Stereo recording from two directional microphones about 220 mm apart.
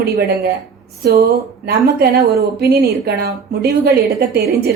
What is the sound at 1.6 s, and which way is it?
A woman's voice, 45° right (ahead or behind).